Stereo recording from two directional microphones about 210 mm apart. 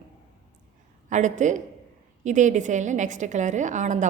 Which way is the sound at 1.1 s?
35° right (ahead or behind).